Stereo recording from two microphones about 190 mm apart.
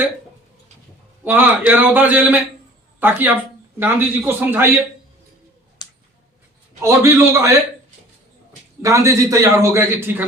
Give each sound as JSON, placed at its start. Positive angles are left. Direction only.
{"t": 1.2, "sound": "a man's voice", "side_deg": -10}
{"t": 5.8, "sound": "a sound", "side_deg": 20}
{"t": 6.8, "sound": "a man's voice", "side_deg": -15}
{"t": 8.8, "sound": "a man's voice", "side_deg": -15}